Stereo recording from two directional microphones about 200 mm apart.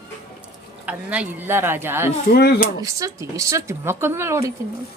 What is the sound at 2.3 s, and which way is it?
Speech, 50° left (ahead or behind).